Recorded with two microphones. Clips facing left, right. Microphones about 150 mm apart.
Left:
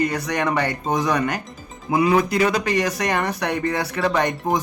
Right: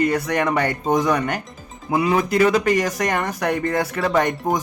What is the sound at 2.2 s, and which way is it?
Speech, 50° right (ahead or behind).